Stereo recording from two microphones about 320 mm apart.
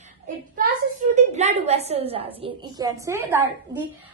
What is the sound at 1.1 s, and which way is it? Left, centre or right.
A woman's voice, right.